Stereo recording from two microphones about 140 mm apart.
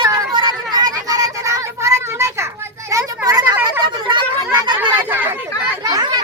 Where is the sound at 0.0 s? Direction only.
30° right (ahead or behind).